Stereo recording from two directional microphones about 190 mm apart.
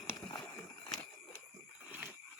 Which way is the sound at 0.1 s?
15° left (ahead or behind).